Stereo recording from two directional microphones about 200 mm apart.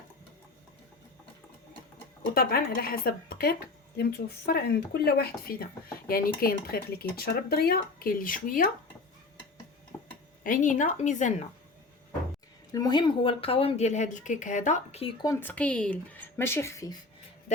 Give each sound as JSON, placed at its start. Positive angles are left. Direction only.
{"t": 2.3, "sound": "speech", "side_deg": 50}
{"t": 9.9, "sound": "a sound", "side_deg": 10}
{"t": 10.4, "sound": "speech", "side_deg": 40}
{"t": 12.7, "sound": "speech", "side_deg": 20}
{"t": 15.3, "sound": "speech", "side_deg": 10}